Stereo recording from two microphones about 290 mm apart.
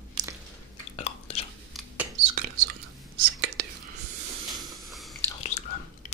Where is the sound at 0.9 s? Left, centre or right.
Left.